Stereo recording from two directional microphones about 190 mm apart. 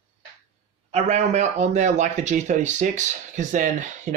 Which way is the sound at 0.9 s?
35° right (ahead or behind).